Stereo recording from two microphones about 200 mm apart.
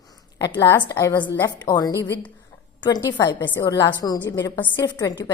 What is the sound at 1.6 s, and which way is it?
Speech, 20° left (ahead or behind).